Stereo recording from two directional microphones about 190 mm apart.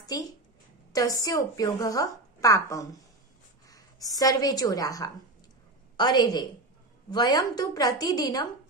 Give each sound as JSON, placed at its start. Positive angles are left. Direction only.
{"t": 0.1, "sound": "a woman's voice", "side_deg": 20}